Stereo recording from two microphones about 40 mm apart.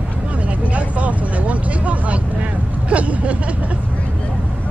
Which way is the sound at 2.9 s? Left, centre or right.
Right.